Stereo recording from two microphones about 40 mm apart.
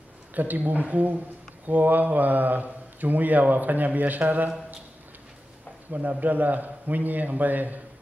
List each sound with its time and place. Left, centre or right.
0.3 s speech: right
5.9 s speech: right